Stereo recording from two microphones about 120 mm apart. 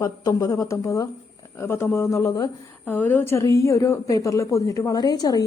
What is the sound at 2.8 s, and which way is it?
A woman's voice, 15° left (ahead or behind).